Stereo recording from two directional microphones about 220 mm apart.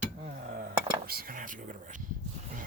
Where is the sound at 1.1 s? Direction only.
40° right (ahead or behind).